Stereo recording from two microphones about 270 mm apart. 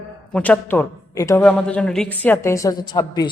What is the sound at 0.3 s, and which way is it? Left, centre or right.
A woman's voice, centre.